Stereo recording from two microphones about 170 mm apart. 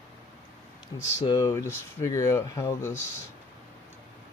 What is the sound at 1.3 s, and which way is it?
Speech, 20° left (ahead or behind).